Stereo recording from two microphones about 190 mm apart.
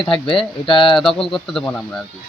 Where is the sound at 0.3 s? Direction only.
25° left (ahead or behind).